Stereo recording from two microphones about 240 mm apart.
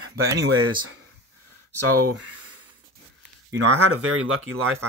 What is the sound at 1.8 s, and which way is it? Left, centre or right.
Speech, right.